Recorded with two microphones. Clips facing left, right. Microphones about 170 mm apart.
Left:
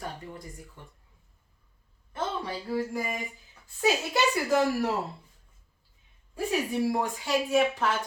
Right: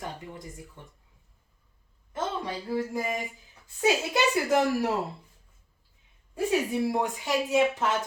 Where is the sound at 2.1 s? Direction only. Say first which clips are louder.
Right 1 dB; 20° right (ahead or behind).